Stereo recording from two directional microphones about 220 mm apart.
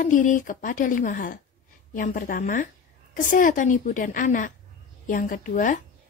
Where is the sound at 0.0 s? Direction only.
35° left (ahead or behind).